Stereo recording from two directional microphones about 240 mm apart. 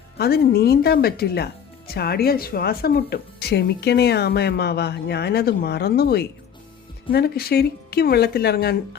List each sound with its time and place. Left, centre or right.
0.2 s speech: left